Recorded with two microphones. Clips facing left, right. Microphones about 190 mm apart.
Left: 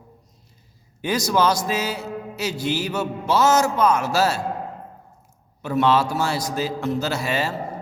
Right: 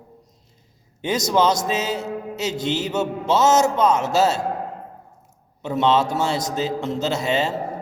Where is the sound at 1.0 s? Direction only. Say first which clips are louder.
Right 1 dB; 20° right (ahead or behind).